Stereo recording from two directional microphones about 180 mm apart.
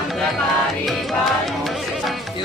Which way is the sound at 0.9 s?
Centre (ahead or behind).